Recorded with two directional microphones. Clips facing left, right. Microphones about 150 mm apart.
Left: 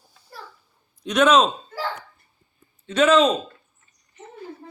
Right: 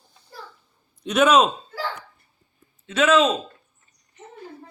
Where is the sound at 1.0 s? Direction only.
5° right (ahead or behind).